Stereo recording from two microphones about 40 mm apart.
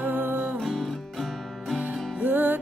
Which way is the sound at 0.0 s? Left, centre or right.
Right.